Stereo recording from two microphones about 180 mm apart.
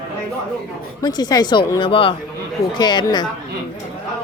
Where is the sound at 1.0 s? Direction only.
25° left (ahead or behind).